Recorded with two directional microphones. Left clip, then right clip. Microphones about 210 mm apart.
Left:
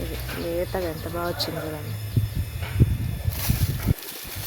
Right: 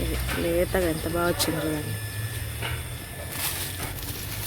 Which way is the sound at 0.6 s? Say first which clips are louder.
Right 3 dB; 5° right (ahead or behind).